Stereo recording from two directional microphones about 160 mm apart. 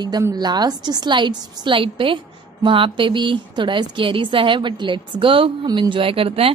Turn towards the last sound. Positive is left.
turn(degrees=-35)  # may be behind; listen again after turning